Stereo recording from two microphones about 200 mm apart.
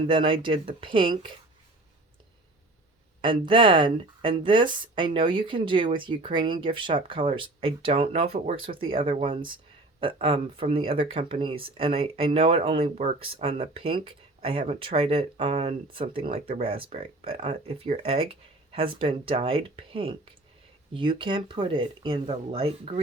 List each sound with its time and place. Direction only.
0.1 s speech: 25° right (ahead or behind)
3.2 s speech: 25° right (ahead or behind)